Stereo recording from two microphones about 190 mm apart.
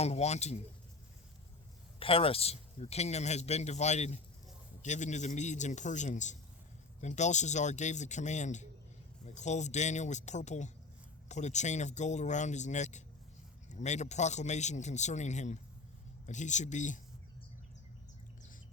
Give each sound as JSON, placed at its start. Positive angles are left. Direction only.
{"t": 0.0, "sound": "speech", "side_deg": 35}
{"t": 2.0, "sound": "speech", "side_deg": 30}